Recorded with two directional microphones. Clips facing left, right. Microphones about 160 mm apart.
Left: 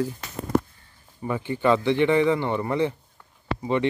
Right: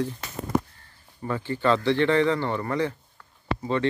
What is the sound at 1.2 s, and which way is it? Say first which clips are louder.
Speech: left 1 dB; 15° left (ahead or behind).